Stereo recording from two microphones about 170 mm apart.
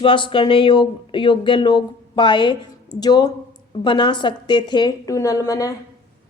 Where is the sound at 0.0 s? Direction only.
30° left (ahead or behind).